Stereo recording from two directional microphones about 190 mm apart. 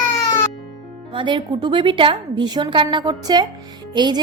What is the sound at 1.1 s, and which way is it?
A woman's voice, 25° right (ahead or behind).